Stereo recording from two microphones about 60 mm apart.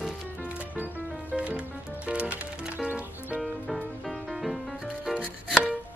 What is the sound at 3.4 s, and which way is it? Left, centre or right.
Music, centre.